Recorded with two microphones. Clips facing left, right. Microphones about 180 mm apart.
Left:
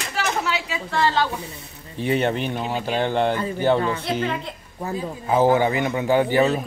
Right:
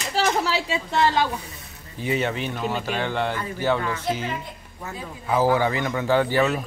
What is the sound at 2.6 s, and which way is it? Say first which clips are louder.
Speech: left 2 dB; 35° left (ahead or behind).